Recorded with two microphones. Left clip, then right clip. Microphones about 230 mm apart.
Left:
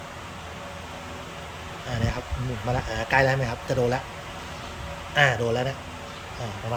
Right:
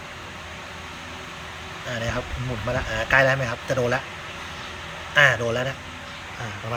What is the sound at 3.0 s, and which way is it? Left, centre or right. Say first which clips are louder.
A man's voice: right 3 dB; centre.